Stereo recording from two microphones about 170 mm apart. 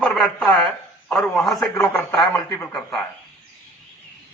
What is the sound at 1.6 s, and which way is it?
Speech, 15° left (ahead or behind).